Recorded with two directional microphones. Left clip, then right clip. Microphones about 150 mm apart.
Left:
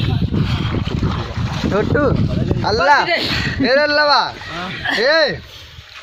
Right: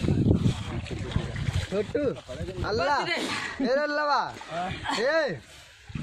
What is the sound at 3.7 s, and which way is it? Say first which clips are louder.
Speech: left 12 dB; 25° left (ahead or behind).